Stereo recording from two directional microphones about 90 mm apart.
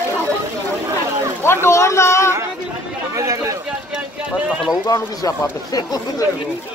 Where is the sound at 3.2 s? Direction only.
35° right (ahead or behind).